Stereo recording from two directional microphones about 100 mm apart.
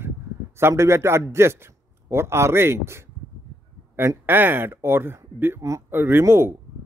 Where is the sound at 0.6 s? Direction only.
25° right (ahead or behind).